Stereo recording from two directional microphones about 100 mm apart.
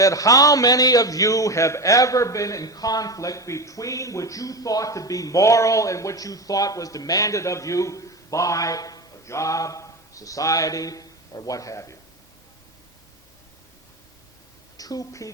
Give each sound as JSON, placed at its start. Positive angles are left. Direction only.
{"t": 0.0, "sound": "a man's voice", "side_deg": 35}
{"t": 14.8, "sound": "a woman's voice", "side_deg": 35}